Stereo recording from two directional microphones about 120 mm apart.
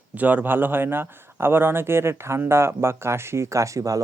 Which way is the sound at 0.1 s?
15° right (ahead or behind).